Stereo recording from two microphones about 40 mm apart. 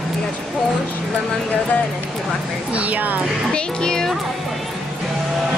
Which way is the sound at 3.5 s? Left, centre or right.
Centre.